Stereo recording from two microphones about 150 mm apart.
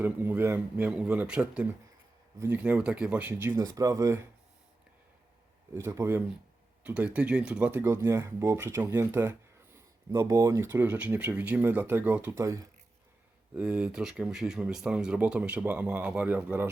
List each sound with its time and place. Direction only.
0.0 s speech: 15° right (ahead or behind)
5.7 s speech: 20° right (ahead or behind)
13.6 s speech: 5° right (ahead or behind)